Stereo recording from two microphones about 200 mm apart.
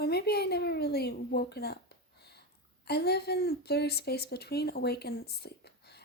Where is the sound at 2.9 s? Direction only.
55° left (ahead or behind).